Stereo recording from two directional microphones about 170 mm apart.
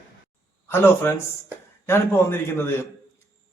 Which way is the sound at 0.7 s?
15° left (ahead or behind).